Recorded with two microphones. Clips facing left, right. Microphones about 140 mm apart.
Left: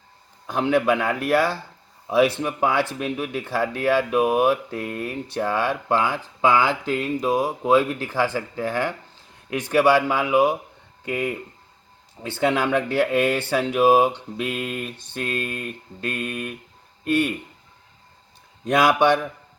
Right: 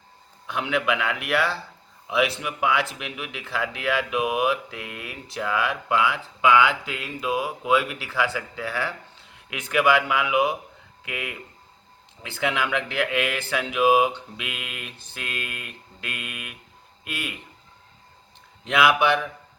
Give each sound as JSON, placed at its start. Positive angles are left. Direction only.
{"t": 0.4, "sound": "speech", "side_deg": 40}
{"t": 12.4, "sound": "speech", "side_deg": 35}
{"t": 17.0, "sound": "speech", "side_deg": 30}
{"t": 18.7, "sound": "speech", "side_deg": 35}